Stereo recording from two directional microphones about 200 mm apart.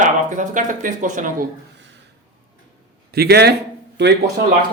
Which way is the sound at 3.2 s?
55° right (ahead or behind).